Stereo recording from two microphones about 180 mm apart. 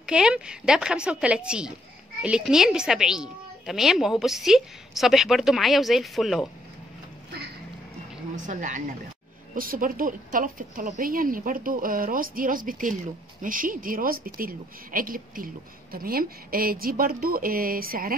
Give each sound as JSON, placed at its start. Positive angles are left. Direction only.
{"t": 0.0, "sound": "speech", "side_deg": -5}
{"t": 8.5, "sound": "a woman's voice", "side_deg": -45}